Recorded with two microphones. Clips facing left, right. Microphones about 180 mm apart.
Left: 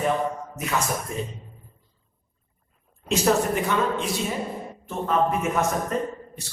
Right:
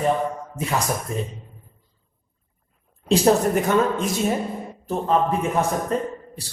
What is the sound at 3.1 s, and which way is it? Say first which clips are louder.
A man's voice: right 4 dB; 45° right (ahead or behind).